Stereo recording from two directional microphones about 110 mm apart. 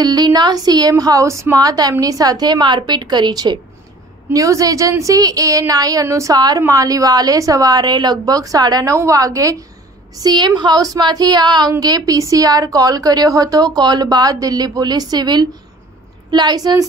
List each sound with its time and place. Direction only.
0.0 s a woman's voice: 35° right (ahead or behind)
4.3 s a woman's voice: 30° right (ahead or behind)